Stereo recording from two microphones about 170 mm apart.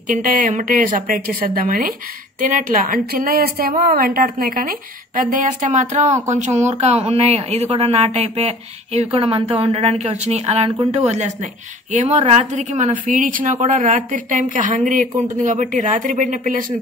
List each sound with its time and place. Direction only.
0.1 s a woman's voice: 50° right (ahead or behind)
11.9 s a woman's voice: 45° right (ahead or behind)